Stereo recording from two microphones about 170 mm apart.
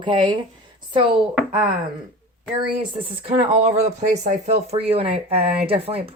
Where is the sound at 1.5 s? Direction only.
30° right (ahead or behind).